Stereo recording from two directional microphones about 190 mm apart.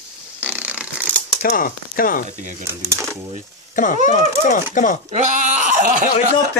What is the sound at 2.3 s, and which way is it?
Sheep, 40° right (ahead or behind).